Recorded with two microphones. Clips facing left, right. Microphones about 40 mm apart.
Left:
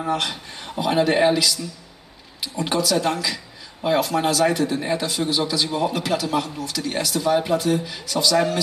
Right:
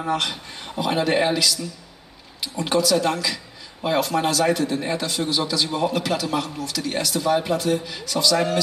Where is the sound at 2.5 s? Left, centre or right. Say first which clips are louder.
Right 1 dB; centre.